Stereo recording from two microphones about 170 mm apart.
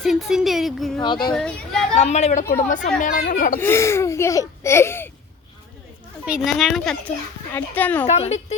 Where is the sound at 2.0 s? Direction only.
40° left (ahead or behind).